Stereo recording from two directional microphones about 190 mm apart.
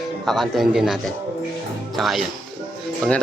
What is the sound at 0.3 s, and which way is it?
Speech, centre (ahead or behind).